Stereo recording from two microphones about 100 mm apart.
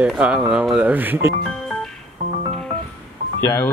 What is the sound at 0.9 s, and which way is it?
Speech, 20° right (ahead or behind).